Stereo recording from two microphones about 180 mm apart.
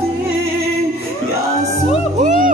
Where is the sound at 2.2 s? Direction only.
45° right (ahead or behind).